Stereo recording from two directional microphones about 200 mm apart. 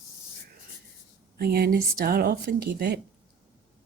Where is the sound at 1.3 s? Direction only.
50° right (ahead or behind).